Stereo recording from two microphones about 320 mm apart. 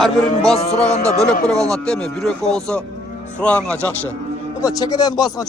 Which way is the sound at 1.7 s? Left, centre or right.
Centre.